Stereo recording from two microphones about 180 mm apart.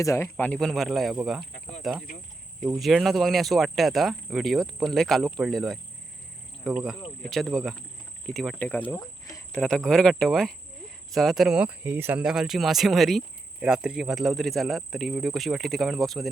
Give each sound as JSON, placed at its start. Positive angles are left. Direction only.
{"t": 0.0, "sound": "speech", "side_deg": 15}
{"t": 9.0, "sound": "cricket", "side_deg": 20}
{"t": 9.5, "sound": "speech", "side_deg": 5}